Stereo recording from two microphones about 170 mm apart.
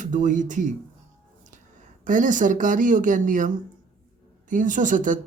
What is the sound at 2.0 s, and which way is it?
Speech, 50° right (ahead or behind).